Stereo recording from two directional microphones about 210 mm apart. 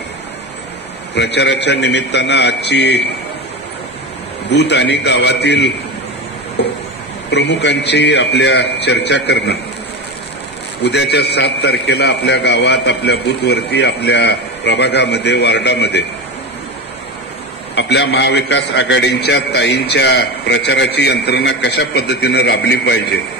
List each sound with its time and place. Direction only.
1.1 s a man's voice: 55° left (ahead or behind)
4.5 s a man's voice: 55° left (ahead or behind)
10.8 s a man's voice: 55° left (ahead or behind)
17.7 s a man's voice: 55° left (ahead or behind)